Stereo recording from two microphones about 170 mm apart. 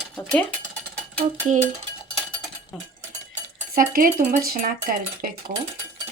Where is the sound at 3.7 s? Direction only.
60° right (ahead or behind).